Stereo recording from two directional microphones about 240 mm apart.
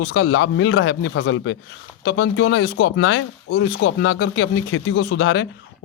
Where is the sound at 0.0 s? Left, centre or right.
Left.